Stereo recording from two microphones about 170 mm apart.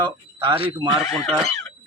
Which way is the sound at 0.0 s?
30° right (ahead or behind).